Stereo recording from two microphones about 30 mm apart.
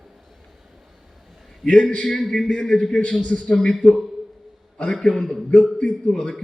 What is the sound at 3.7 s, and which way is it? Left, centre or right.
Speech, centre.